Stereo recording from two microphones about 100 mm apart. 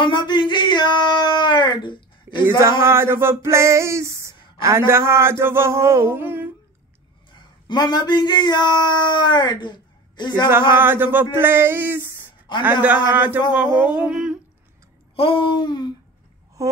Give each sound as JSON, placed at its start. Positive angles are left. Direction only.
{"t": 0.0, "sound": "speech", "side_deg": 55}
{"t": 2.6, "sound": "a sound", "side_deg": -25}
{"t": 7.3, "sound": "speech", "side_deg": 50}
{"t": 10.8, "sound": "a sound", "side_deg": -20}
{"t": 12.5, "sound": "a man's voice", "side_deg": 50}
{"t": 13.1, "sound": "humming", "side_deg": -15}
{"t": 15.1, "sound": "babbling", "side_deg": 65}